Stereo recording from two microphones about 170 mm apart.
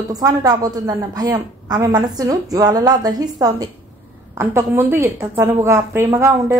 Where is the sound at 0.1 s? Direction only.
20° right (ahead or behind).